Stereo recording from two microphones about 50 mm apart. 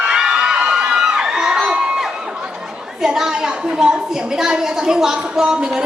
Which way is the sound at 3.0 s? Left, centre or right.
Centre.